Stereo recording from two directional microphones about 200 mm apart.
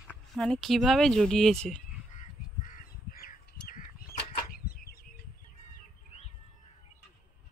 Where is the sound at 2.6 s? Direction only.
45° left (ahead or behind).